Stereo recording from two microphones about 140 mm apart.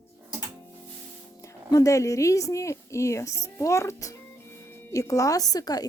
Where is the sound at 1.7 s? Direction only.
25° left (ahead or behind).